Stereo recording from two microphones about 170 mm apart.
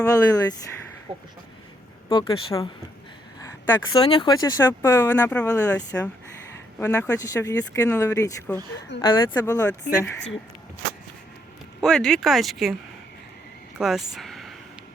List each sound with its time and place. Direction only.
0.0 s speech: 20° left (ahead or behind)
2.0 s speech: 30° left (ahead or behind)
3.9 s speech: 30° left (ahead or behind)
8.5 s speech: 10° left (ahead or behind)
9.0 s speech: 25° left (ahead or behind)
11.8 s speech: 5° left (ahead or behind)
13.7 s speech: centre (ahead or behind)